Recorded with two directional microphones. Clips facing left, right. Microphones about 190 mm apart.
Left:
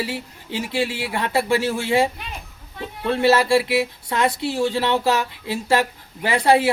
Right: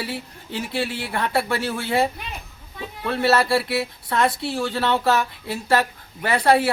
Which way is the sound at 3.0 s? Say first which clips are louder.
Left 2 dB; 20° left (ahead or behind).